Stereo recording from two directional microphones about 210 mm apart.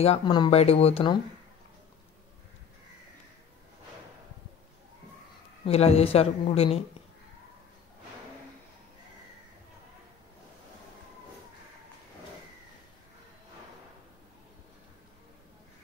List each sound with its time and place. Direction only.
0.0 s speech: 25° left (ahead or behind)
5.7 s speech: 30° left (ahead or behind)